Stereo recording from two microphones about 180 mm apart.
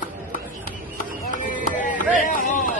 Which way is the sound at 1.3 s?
45° left (ahead or behind).